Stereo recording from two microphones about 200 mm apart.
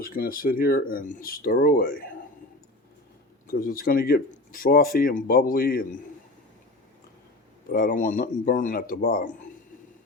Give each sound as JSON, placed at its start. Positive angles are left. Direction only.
{"t": 0.0, "sound": "speech", "side_deg": 45}
{"t": 3.4, "sound": "speech", "side_deg": 45}
{"t": 7.7, "sound": "speech", "side_deg": 45}